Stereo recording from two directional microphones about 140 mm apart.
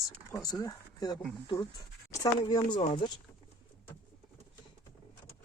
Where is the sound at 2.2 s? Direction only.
25° left (ahead or behind).